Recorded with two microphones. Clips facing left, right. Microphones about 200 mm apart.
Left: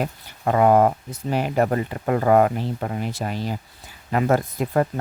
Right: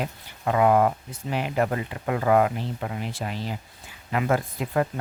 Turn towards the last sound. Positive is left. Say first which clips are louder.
# left 4 dB
turn(degrees=40)  # may be behind; listen again after turning